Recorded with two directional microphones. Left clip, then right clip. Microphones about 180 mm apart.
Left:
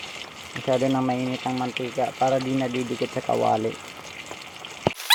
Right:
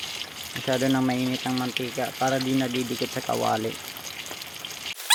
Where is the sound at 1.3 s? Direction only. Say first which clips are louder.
Left 1 dB; 55° right (ahead or behind).